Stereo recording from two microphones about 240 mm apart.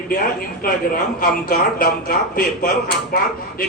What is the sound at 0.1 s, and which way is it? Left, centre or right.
Speech, left.